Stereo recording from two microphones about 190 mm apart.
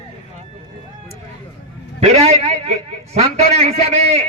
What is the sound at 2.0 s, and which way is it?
A man's voice, 35° right (ahead or behind).